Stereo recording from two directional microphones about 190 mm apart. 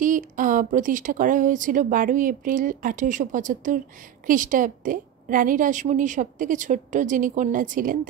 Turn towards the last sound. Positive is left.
turn(degrees=-45)  # may be behind; listen again after turning